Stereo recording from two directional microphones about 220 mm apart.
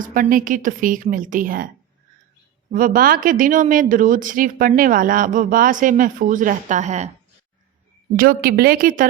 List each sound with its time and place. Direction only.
0.0 s speech: 40° right (ahead or behind)
2.7 s speech: 40° right (ahead or behind)
8.1 s speech: 40° right (ahead or behind)